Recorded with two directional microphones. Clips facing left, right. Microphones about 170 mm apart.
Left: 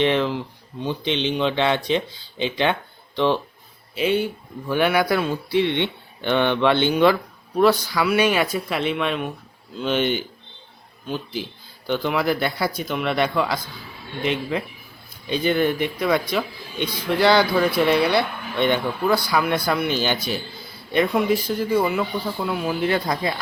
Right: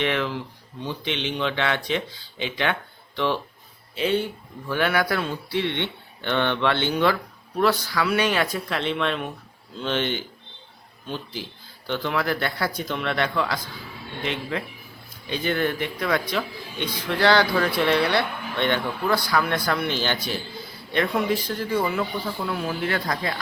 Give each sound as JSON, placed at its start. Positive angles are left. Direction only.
{"t": 0.0, "sound": "speech", "side_deg": 25}
{"t": 3.9, "sound": "speech", "side_deg": 10}
{"t": 15.3, "sound": "speech", "side_deg": 15}